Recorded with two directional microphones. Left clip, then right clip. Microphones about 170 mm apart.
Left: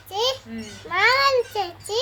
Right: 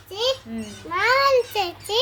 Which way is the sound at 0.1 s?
50° left (ahead or behind).